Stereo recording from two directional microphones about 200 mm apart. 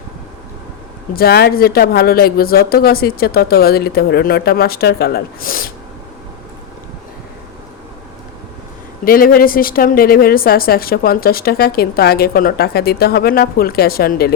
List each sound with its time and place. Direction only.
1.1 s a woman's voice: 50° left (ahead or behind)
9.0 s a woman's voice: 45° left (ahead or behind)